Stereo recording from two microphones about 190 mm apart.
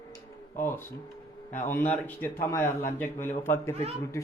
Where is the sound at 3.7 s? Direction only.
30° right (ahead or behind).